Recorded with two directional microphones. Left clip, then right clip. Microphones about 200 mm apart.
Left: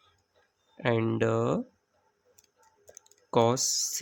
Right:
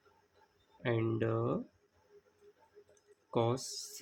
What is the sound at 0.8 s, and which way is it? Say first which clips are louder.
Speech: left 7 dB; 50° left (ahead or behind).